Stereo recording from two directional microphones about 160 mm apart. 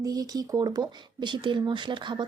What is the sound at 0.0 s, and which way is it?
Speech, 25° right (ahead or behind).